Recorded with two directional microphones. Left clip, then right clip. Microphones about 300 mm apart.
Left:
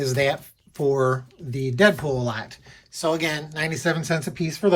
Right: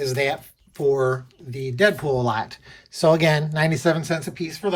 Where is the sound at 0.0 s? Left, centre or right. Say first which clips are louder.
Left 1 dB; centre.